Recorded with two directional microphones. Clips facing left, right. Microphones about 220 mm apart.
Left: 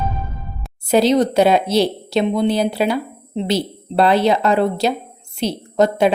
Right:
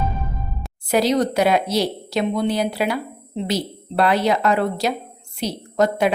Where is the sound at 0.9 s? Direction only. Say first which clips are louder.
Left 4 dB; 25° left (ahead or behind).